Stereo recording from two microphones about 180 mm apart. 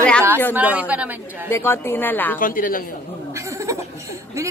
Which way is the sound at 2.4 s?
50° left (ahead or behind).